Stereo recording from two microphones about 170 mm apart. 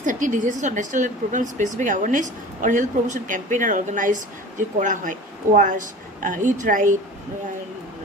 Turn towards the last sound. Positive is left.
turn(degrees=-50)  # may be behind; listen again after turning